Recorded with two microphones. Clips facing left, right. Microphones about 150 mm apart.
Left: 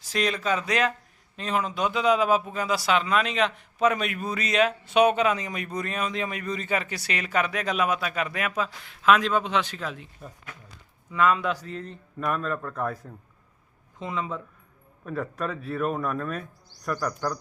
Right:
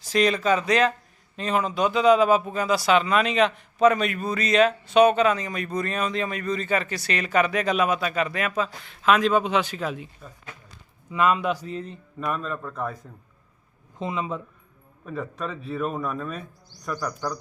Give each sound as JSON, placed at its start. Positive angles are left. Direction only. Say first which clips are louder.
{"t": 0.0, "sound": "speech", "louder": "right 5 dB", "side_deg": 0}
{"t": 11.1, "sound": "speech", "louder": "right 1 dB", "side_deg": -15}
{"t": 12.2, "sound": "speech", "louder": "left 1 dB", "side_deg": 0}
{"t": 14.0, "sound": "speech", "louder": "right 2 dB", "side_deg": -15}
{"t": 15.0, "sound": "speech", "louder": "left 1 dB", "side_deg": 0}